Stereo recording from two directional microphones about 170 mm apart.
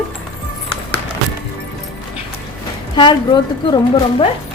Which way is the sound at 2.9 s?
25° left (ahead or behind).